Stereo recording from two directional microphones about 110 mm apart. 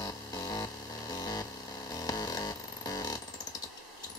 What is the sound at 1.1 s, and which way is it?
Vehicle, 35° left (ahead or behind).